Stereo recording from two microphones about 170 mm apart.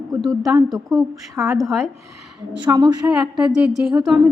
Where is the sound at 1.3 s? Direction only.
15° right (ahead or behind).